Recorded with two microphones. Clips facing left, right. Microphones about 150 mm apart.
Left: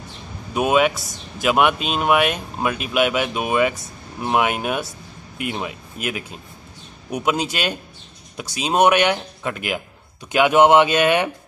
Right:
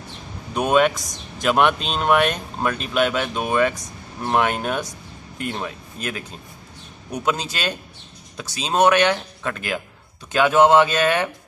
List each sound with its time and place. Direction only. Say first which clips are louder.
0.6 s speech: even; 5° left (ahead or behind)